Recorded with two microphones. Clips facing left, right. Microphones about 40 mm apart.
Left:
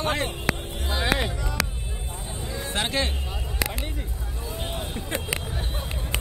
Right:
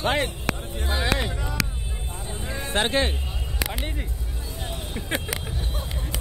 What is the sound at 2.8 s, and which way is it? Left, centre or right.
Speech, centre.